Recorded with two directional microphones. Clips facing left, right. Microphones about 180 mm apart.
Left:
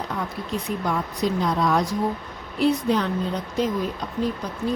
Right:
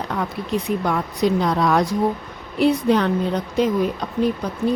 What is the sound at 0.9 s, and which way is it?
A woman's voice, 70° right (ahead or behind).